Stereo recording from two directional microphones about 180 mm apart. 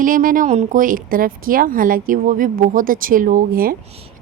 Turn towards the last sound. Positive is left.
turn(degrees=-55)  # may be behind; listen again after turning